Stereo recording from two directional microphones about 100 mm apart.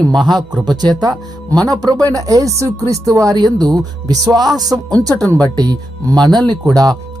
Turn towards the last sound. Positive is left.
turn(degrees=-40)  # may be behind; listen again after turning